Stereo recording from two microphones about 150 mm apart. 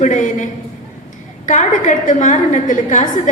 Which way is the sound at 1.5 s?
55° left (ahead or behind).